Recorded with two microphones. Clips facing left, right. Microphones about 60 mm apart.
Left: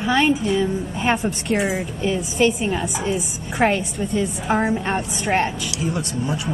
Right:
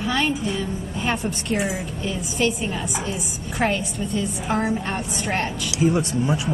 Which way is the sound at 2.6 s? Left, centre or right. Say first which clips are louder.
Left 4 dB; centre.